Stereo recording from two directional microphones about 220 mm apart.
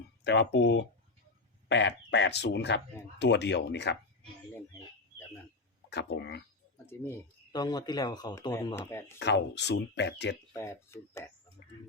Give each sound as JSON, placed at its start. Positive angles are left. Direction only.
{"t": 0.3, "sound": "speech", "side_deg": 50}
{"t": 5.9, "sound": "speech", "side_deg": 50}
{"t": 6.8, "sound": "speech", "side_deg": 10}
{"t": 9.1, "sound": "speech", "side_deg": 55}
{"t": 10.5, "sound": "speech", "side_deg": 10}